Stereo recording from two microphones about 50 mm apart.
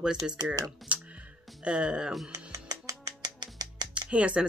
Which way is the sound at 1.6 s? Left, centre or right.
Centre.